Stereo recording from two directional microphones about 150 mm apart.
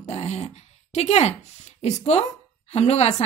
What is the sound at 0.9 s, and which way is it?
A woman's voice, 45° left (ahead or behind).